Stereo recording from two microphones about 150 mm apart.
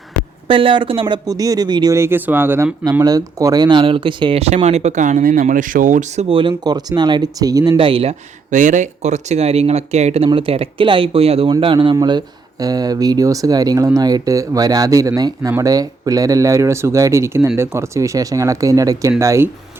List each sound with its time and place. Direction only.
0.4 s speech: 35° right (ahead or behind); by 2.7 s 15° right (ahead or behind)
3.0 s speech: 25° right (ahead or behind); by 6.2 s 55° right (ahead or behind)
6.2 s speech: 35° right (ahead or behind)
8.4 s speech: 55° right (ahead or behind); by 19.5 s 20° right (ahead or behind)